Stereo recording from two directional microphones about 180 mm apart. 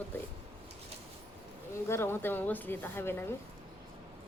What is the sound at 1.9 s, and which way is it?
A woman's voice, 15° left (ahead or behind).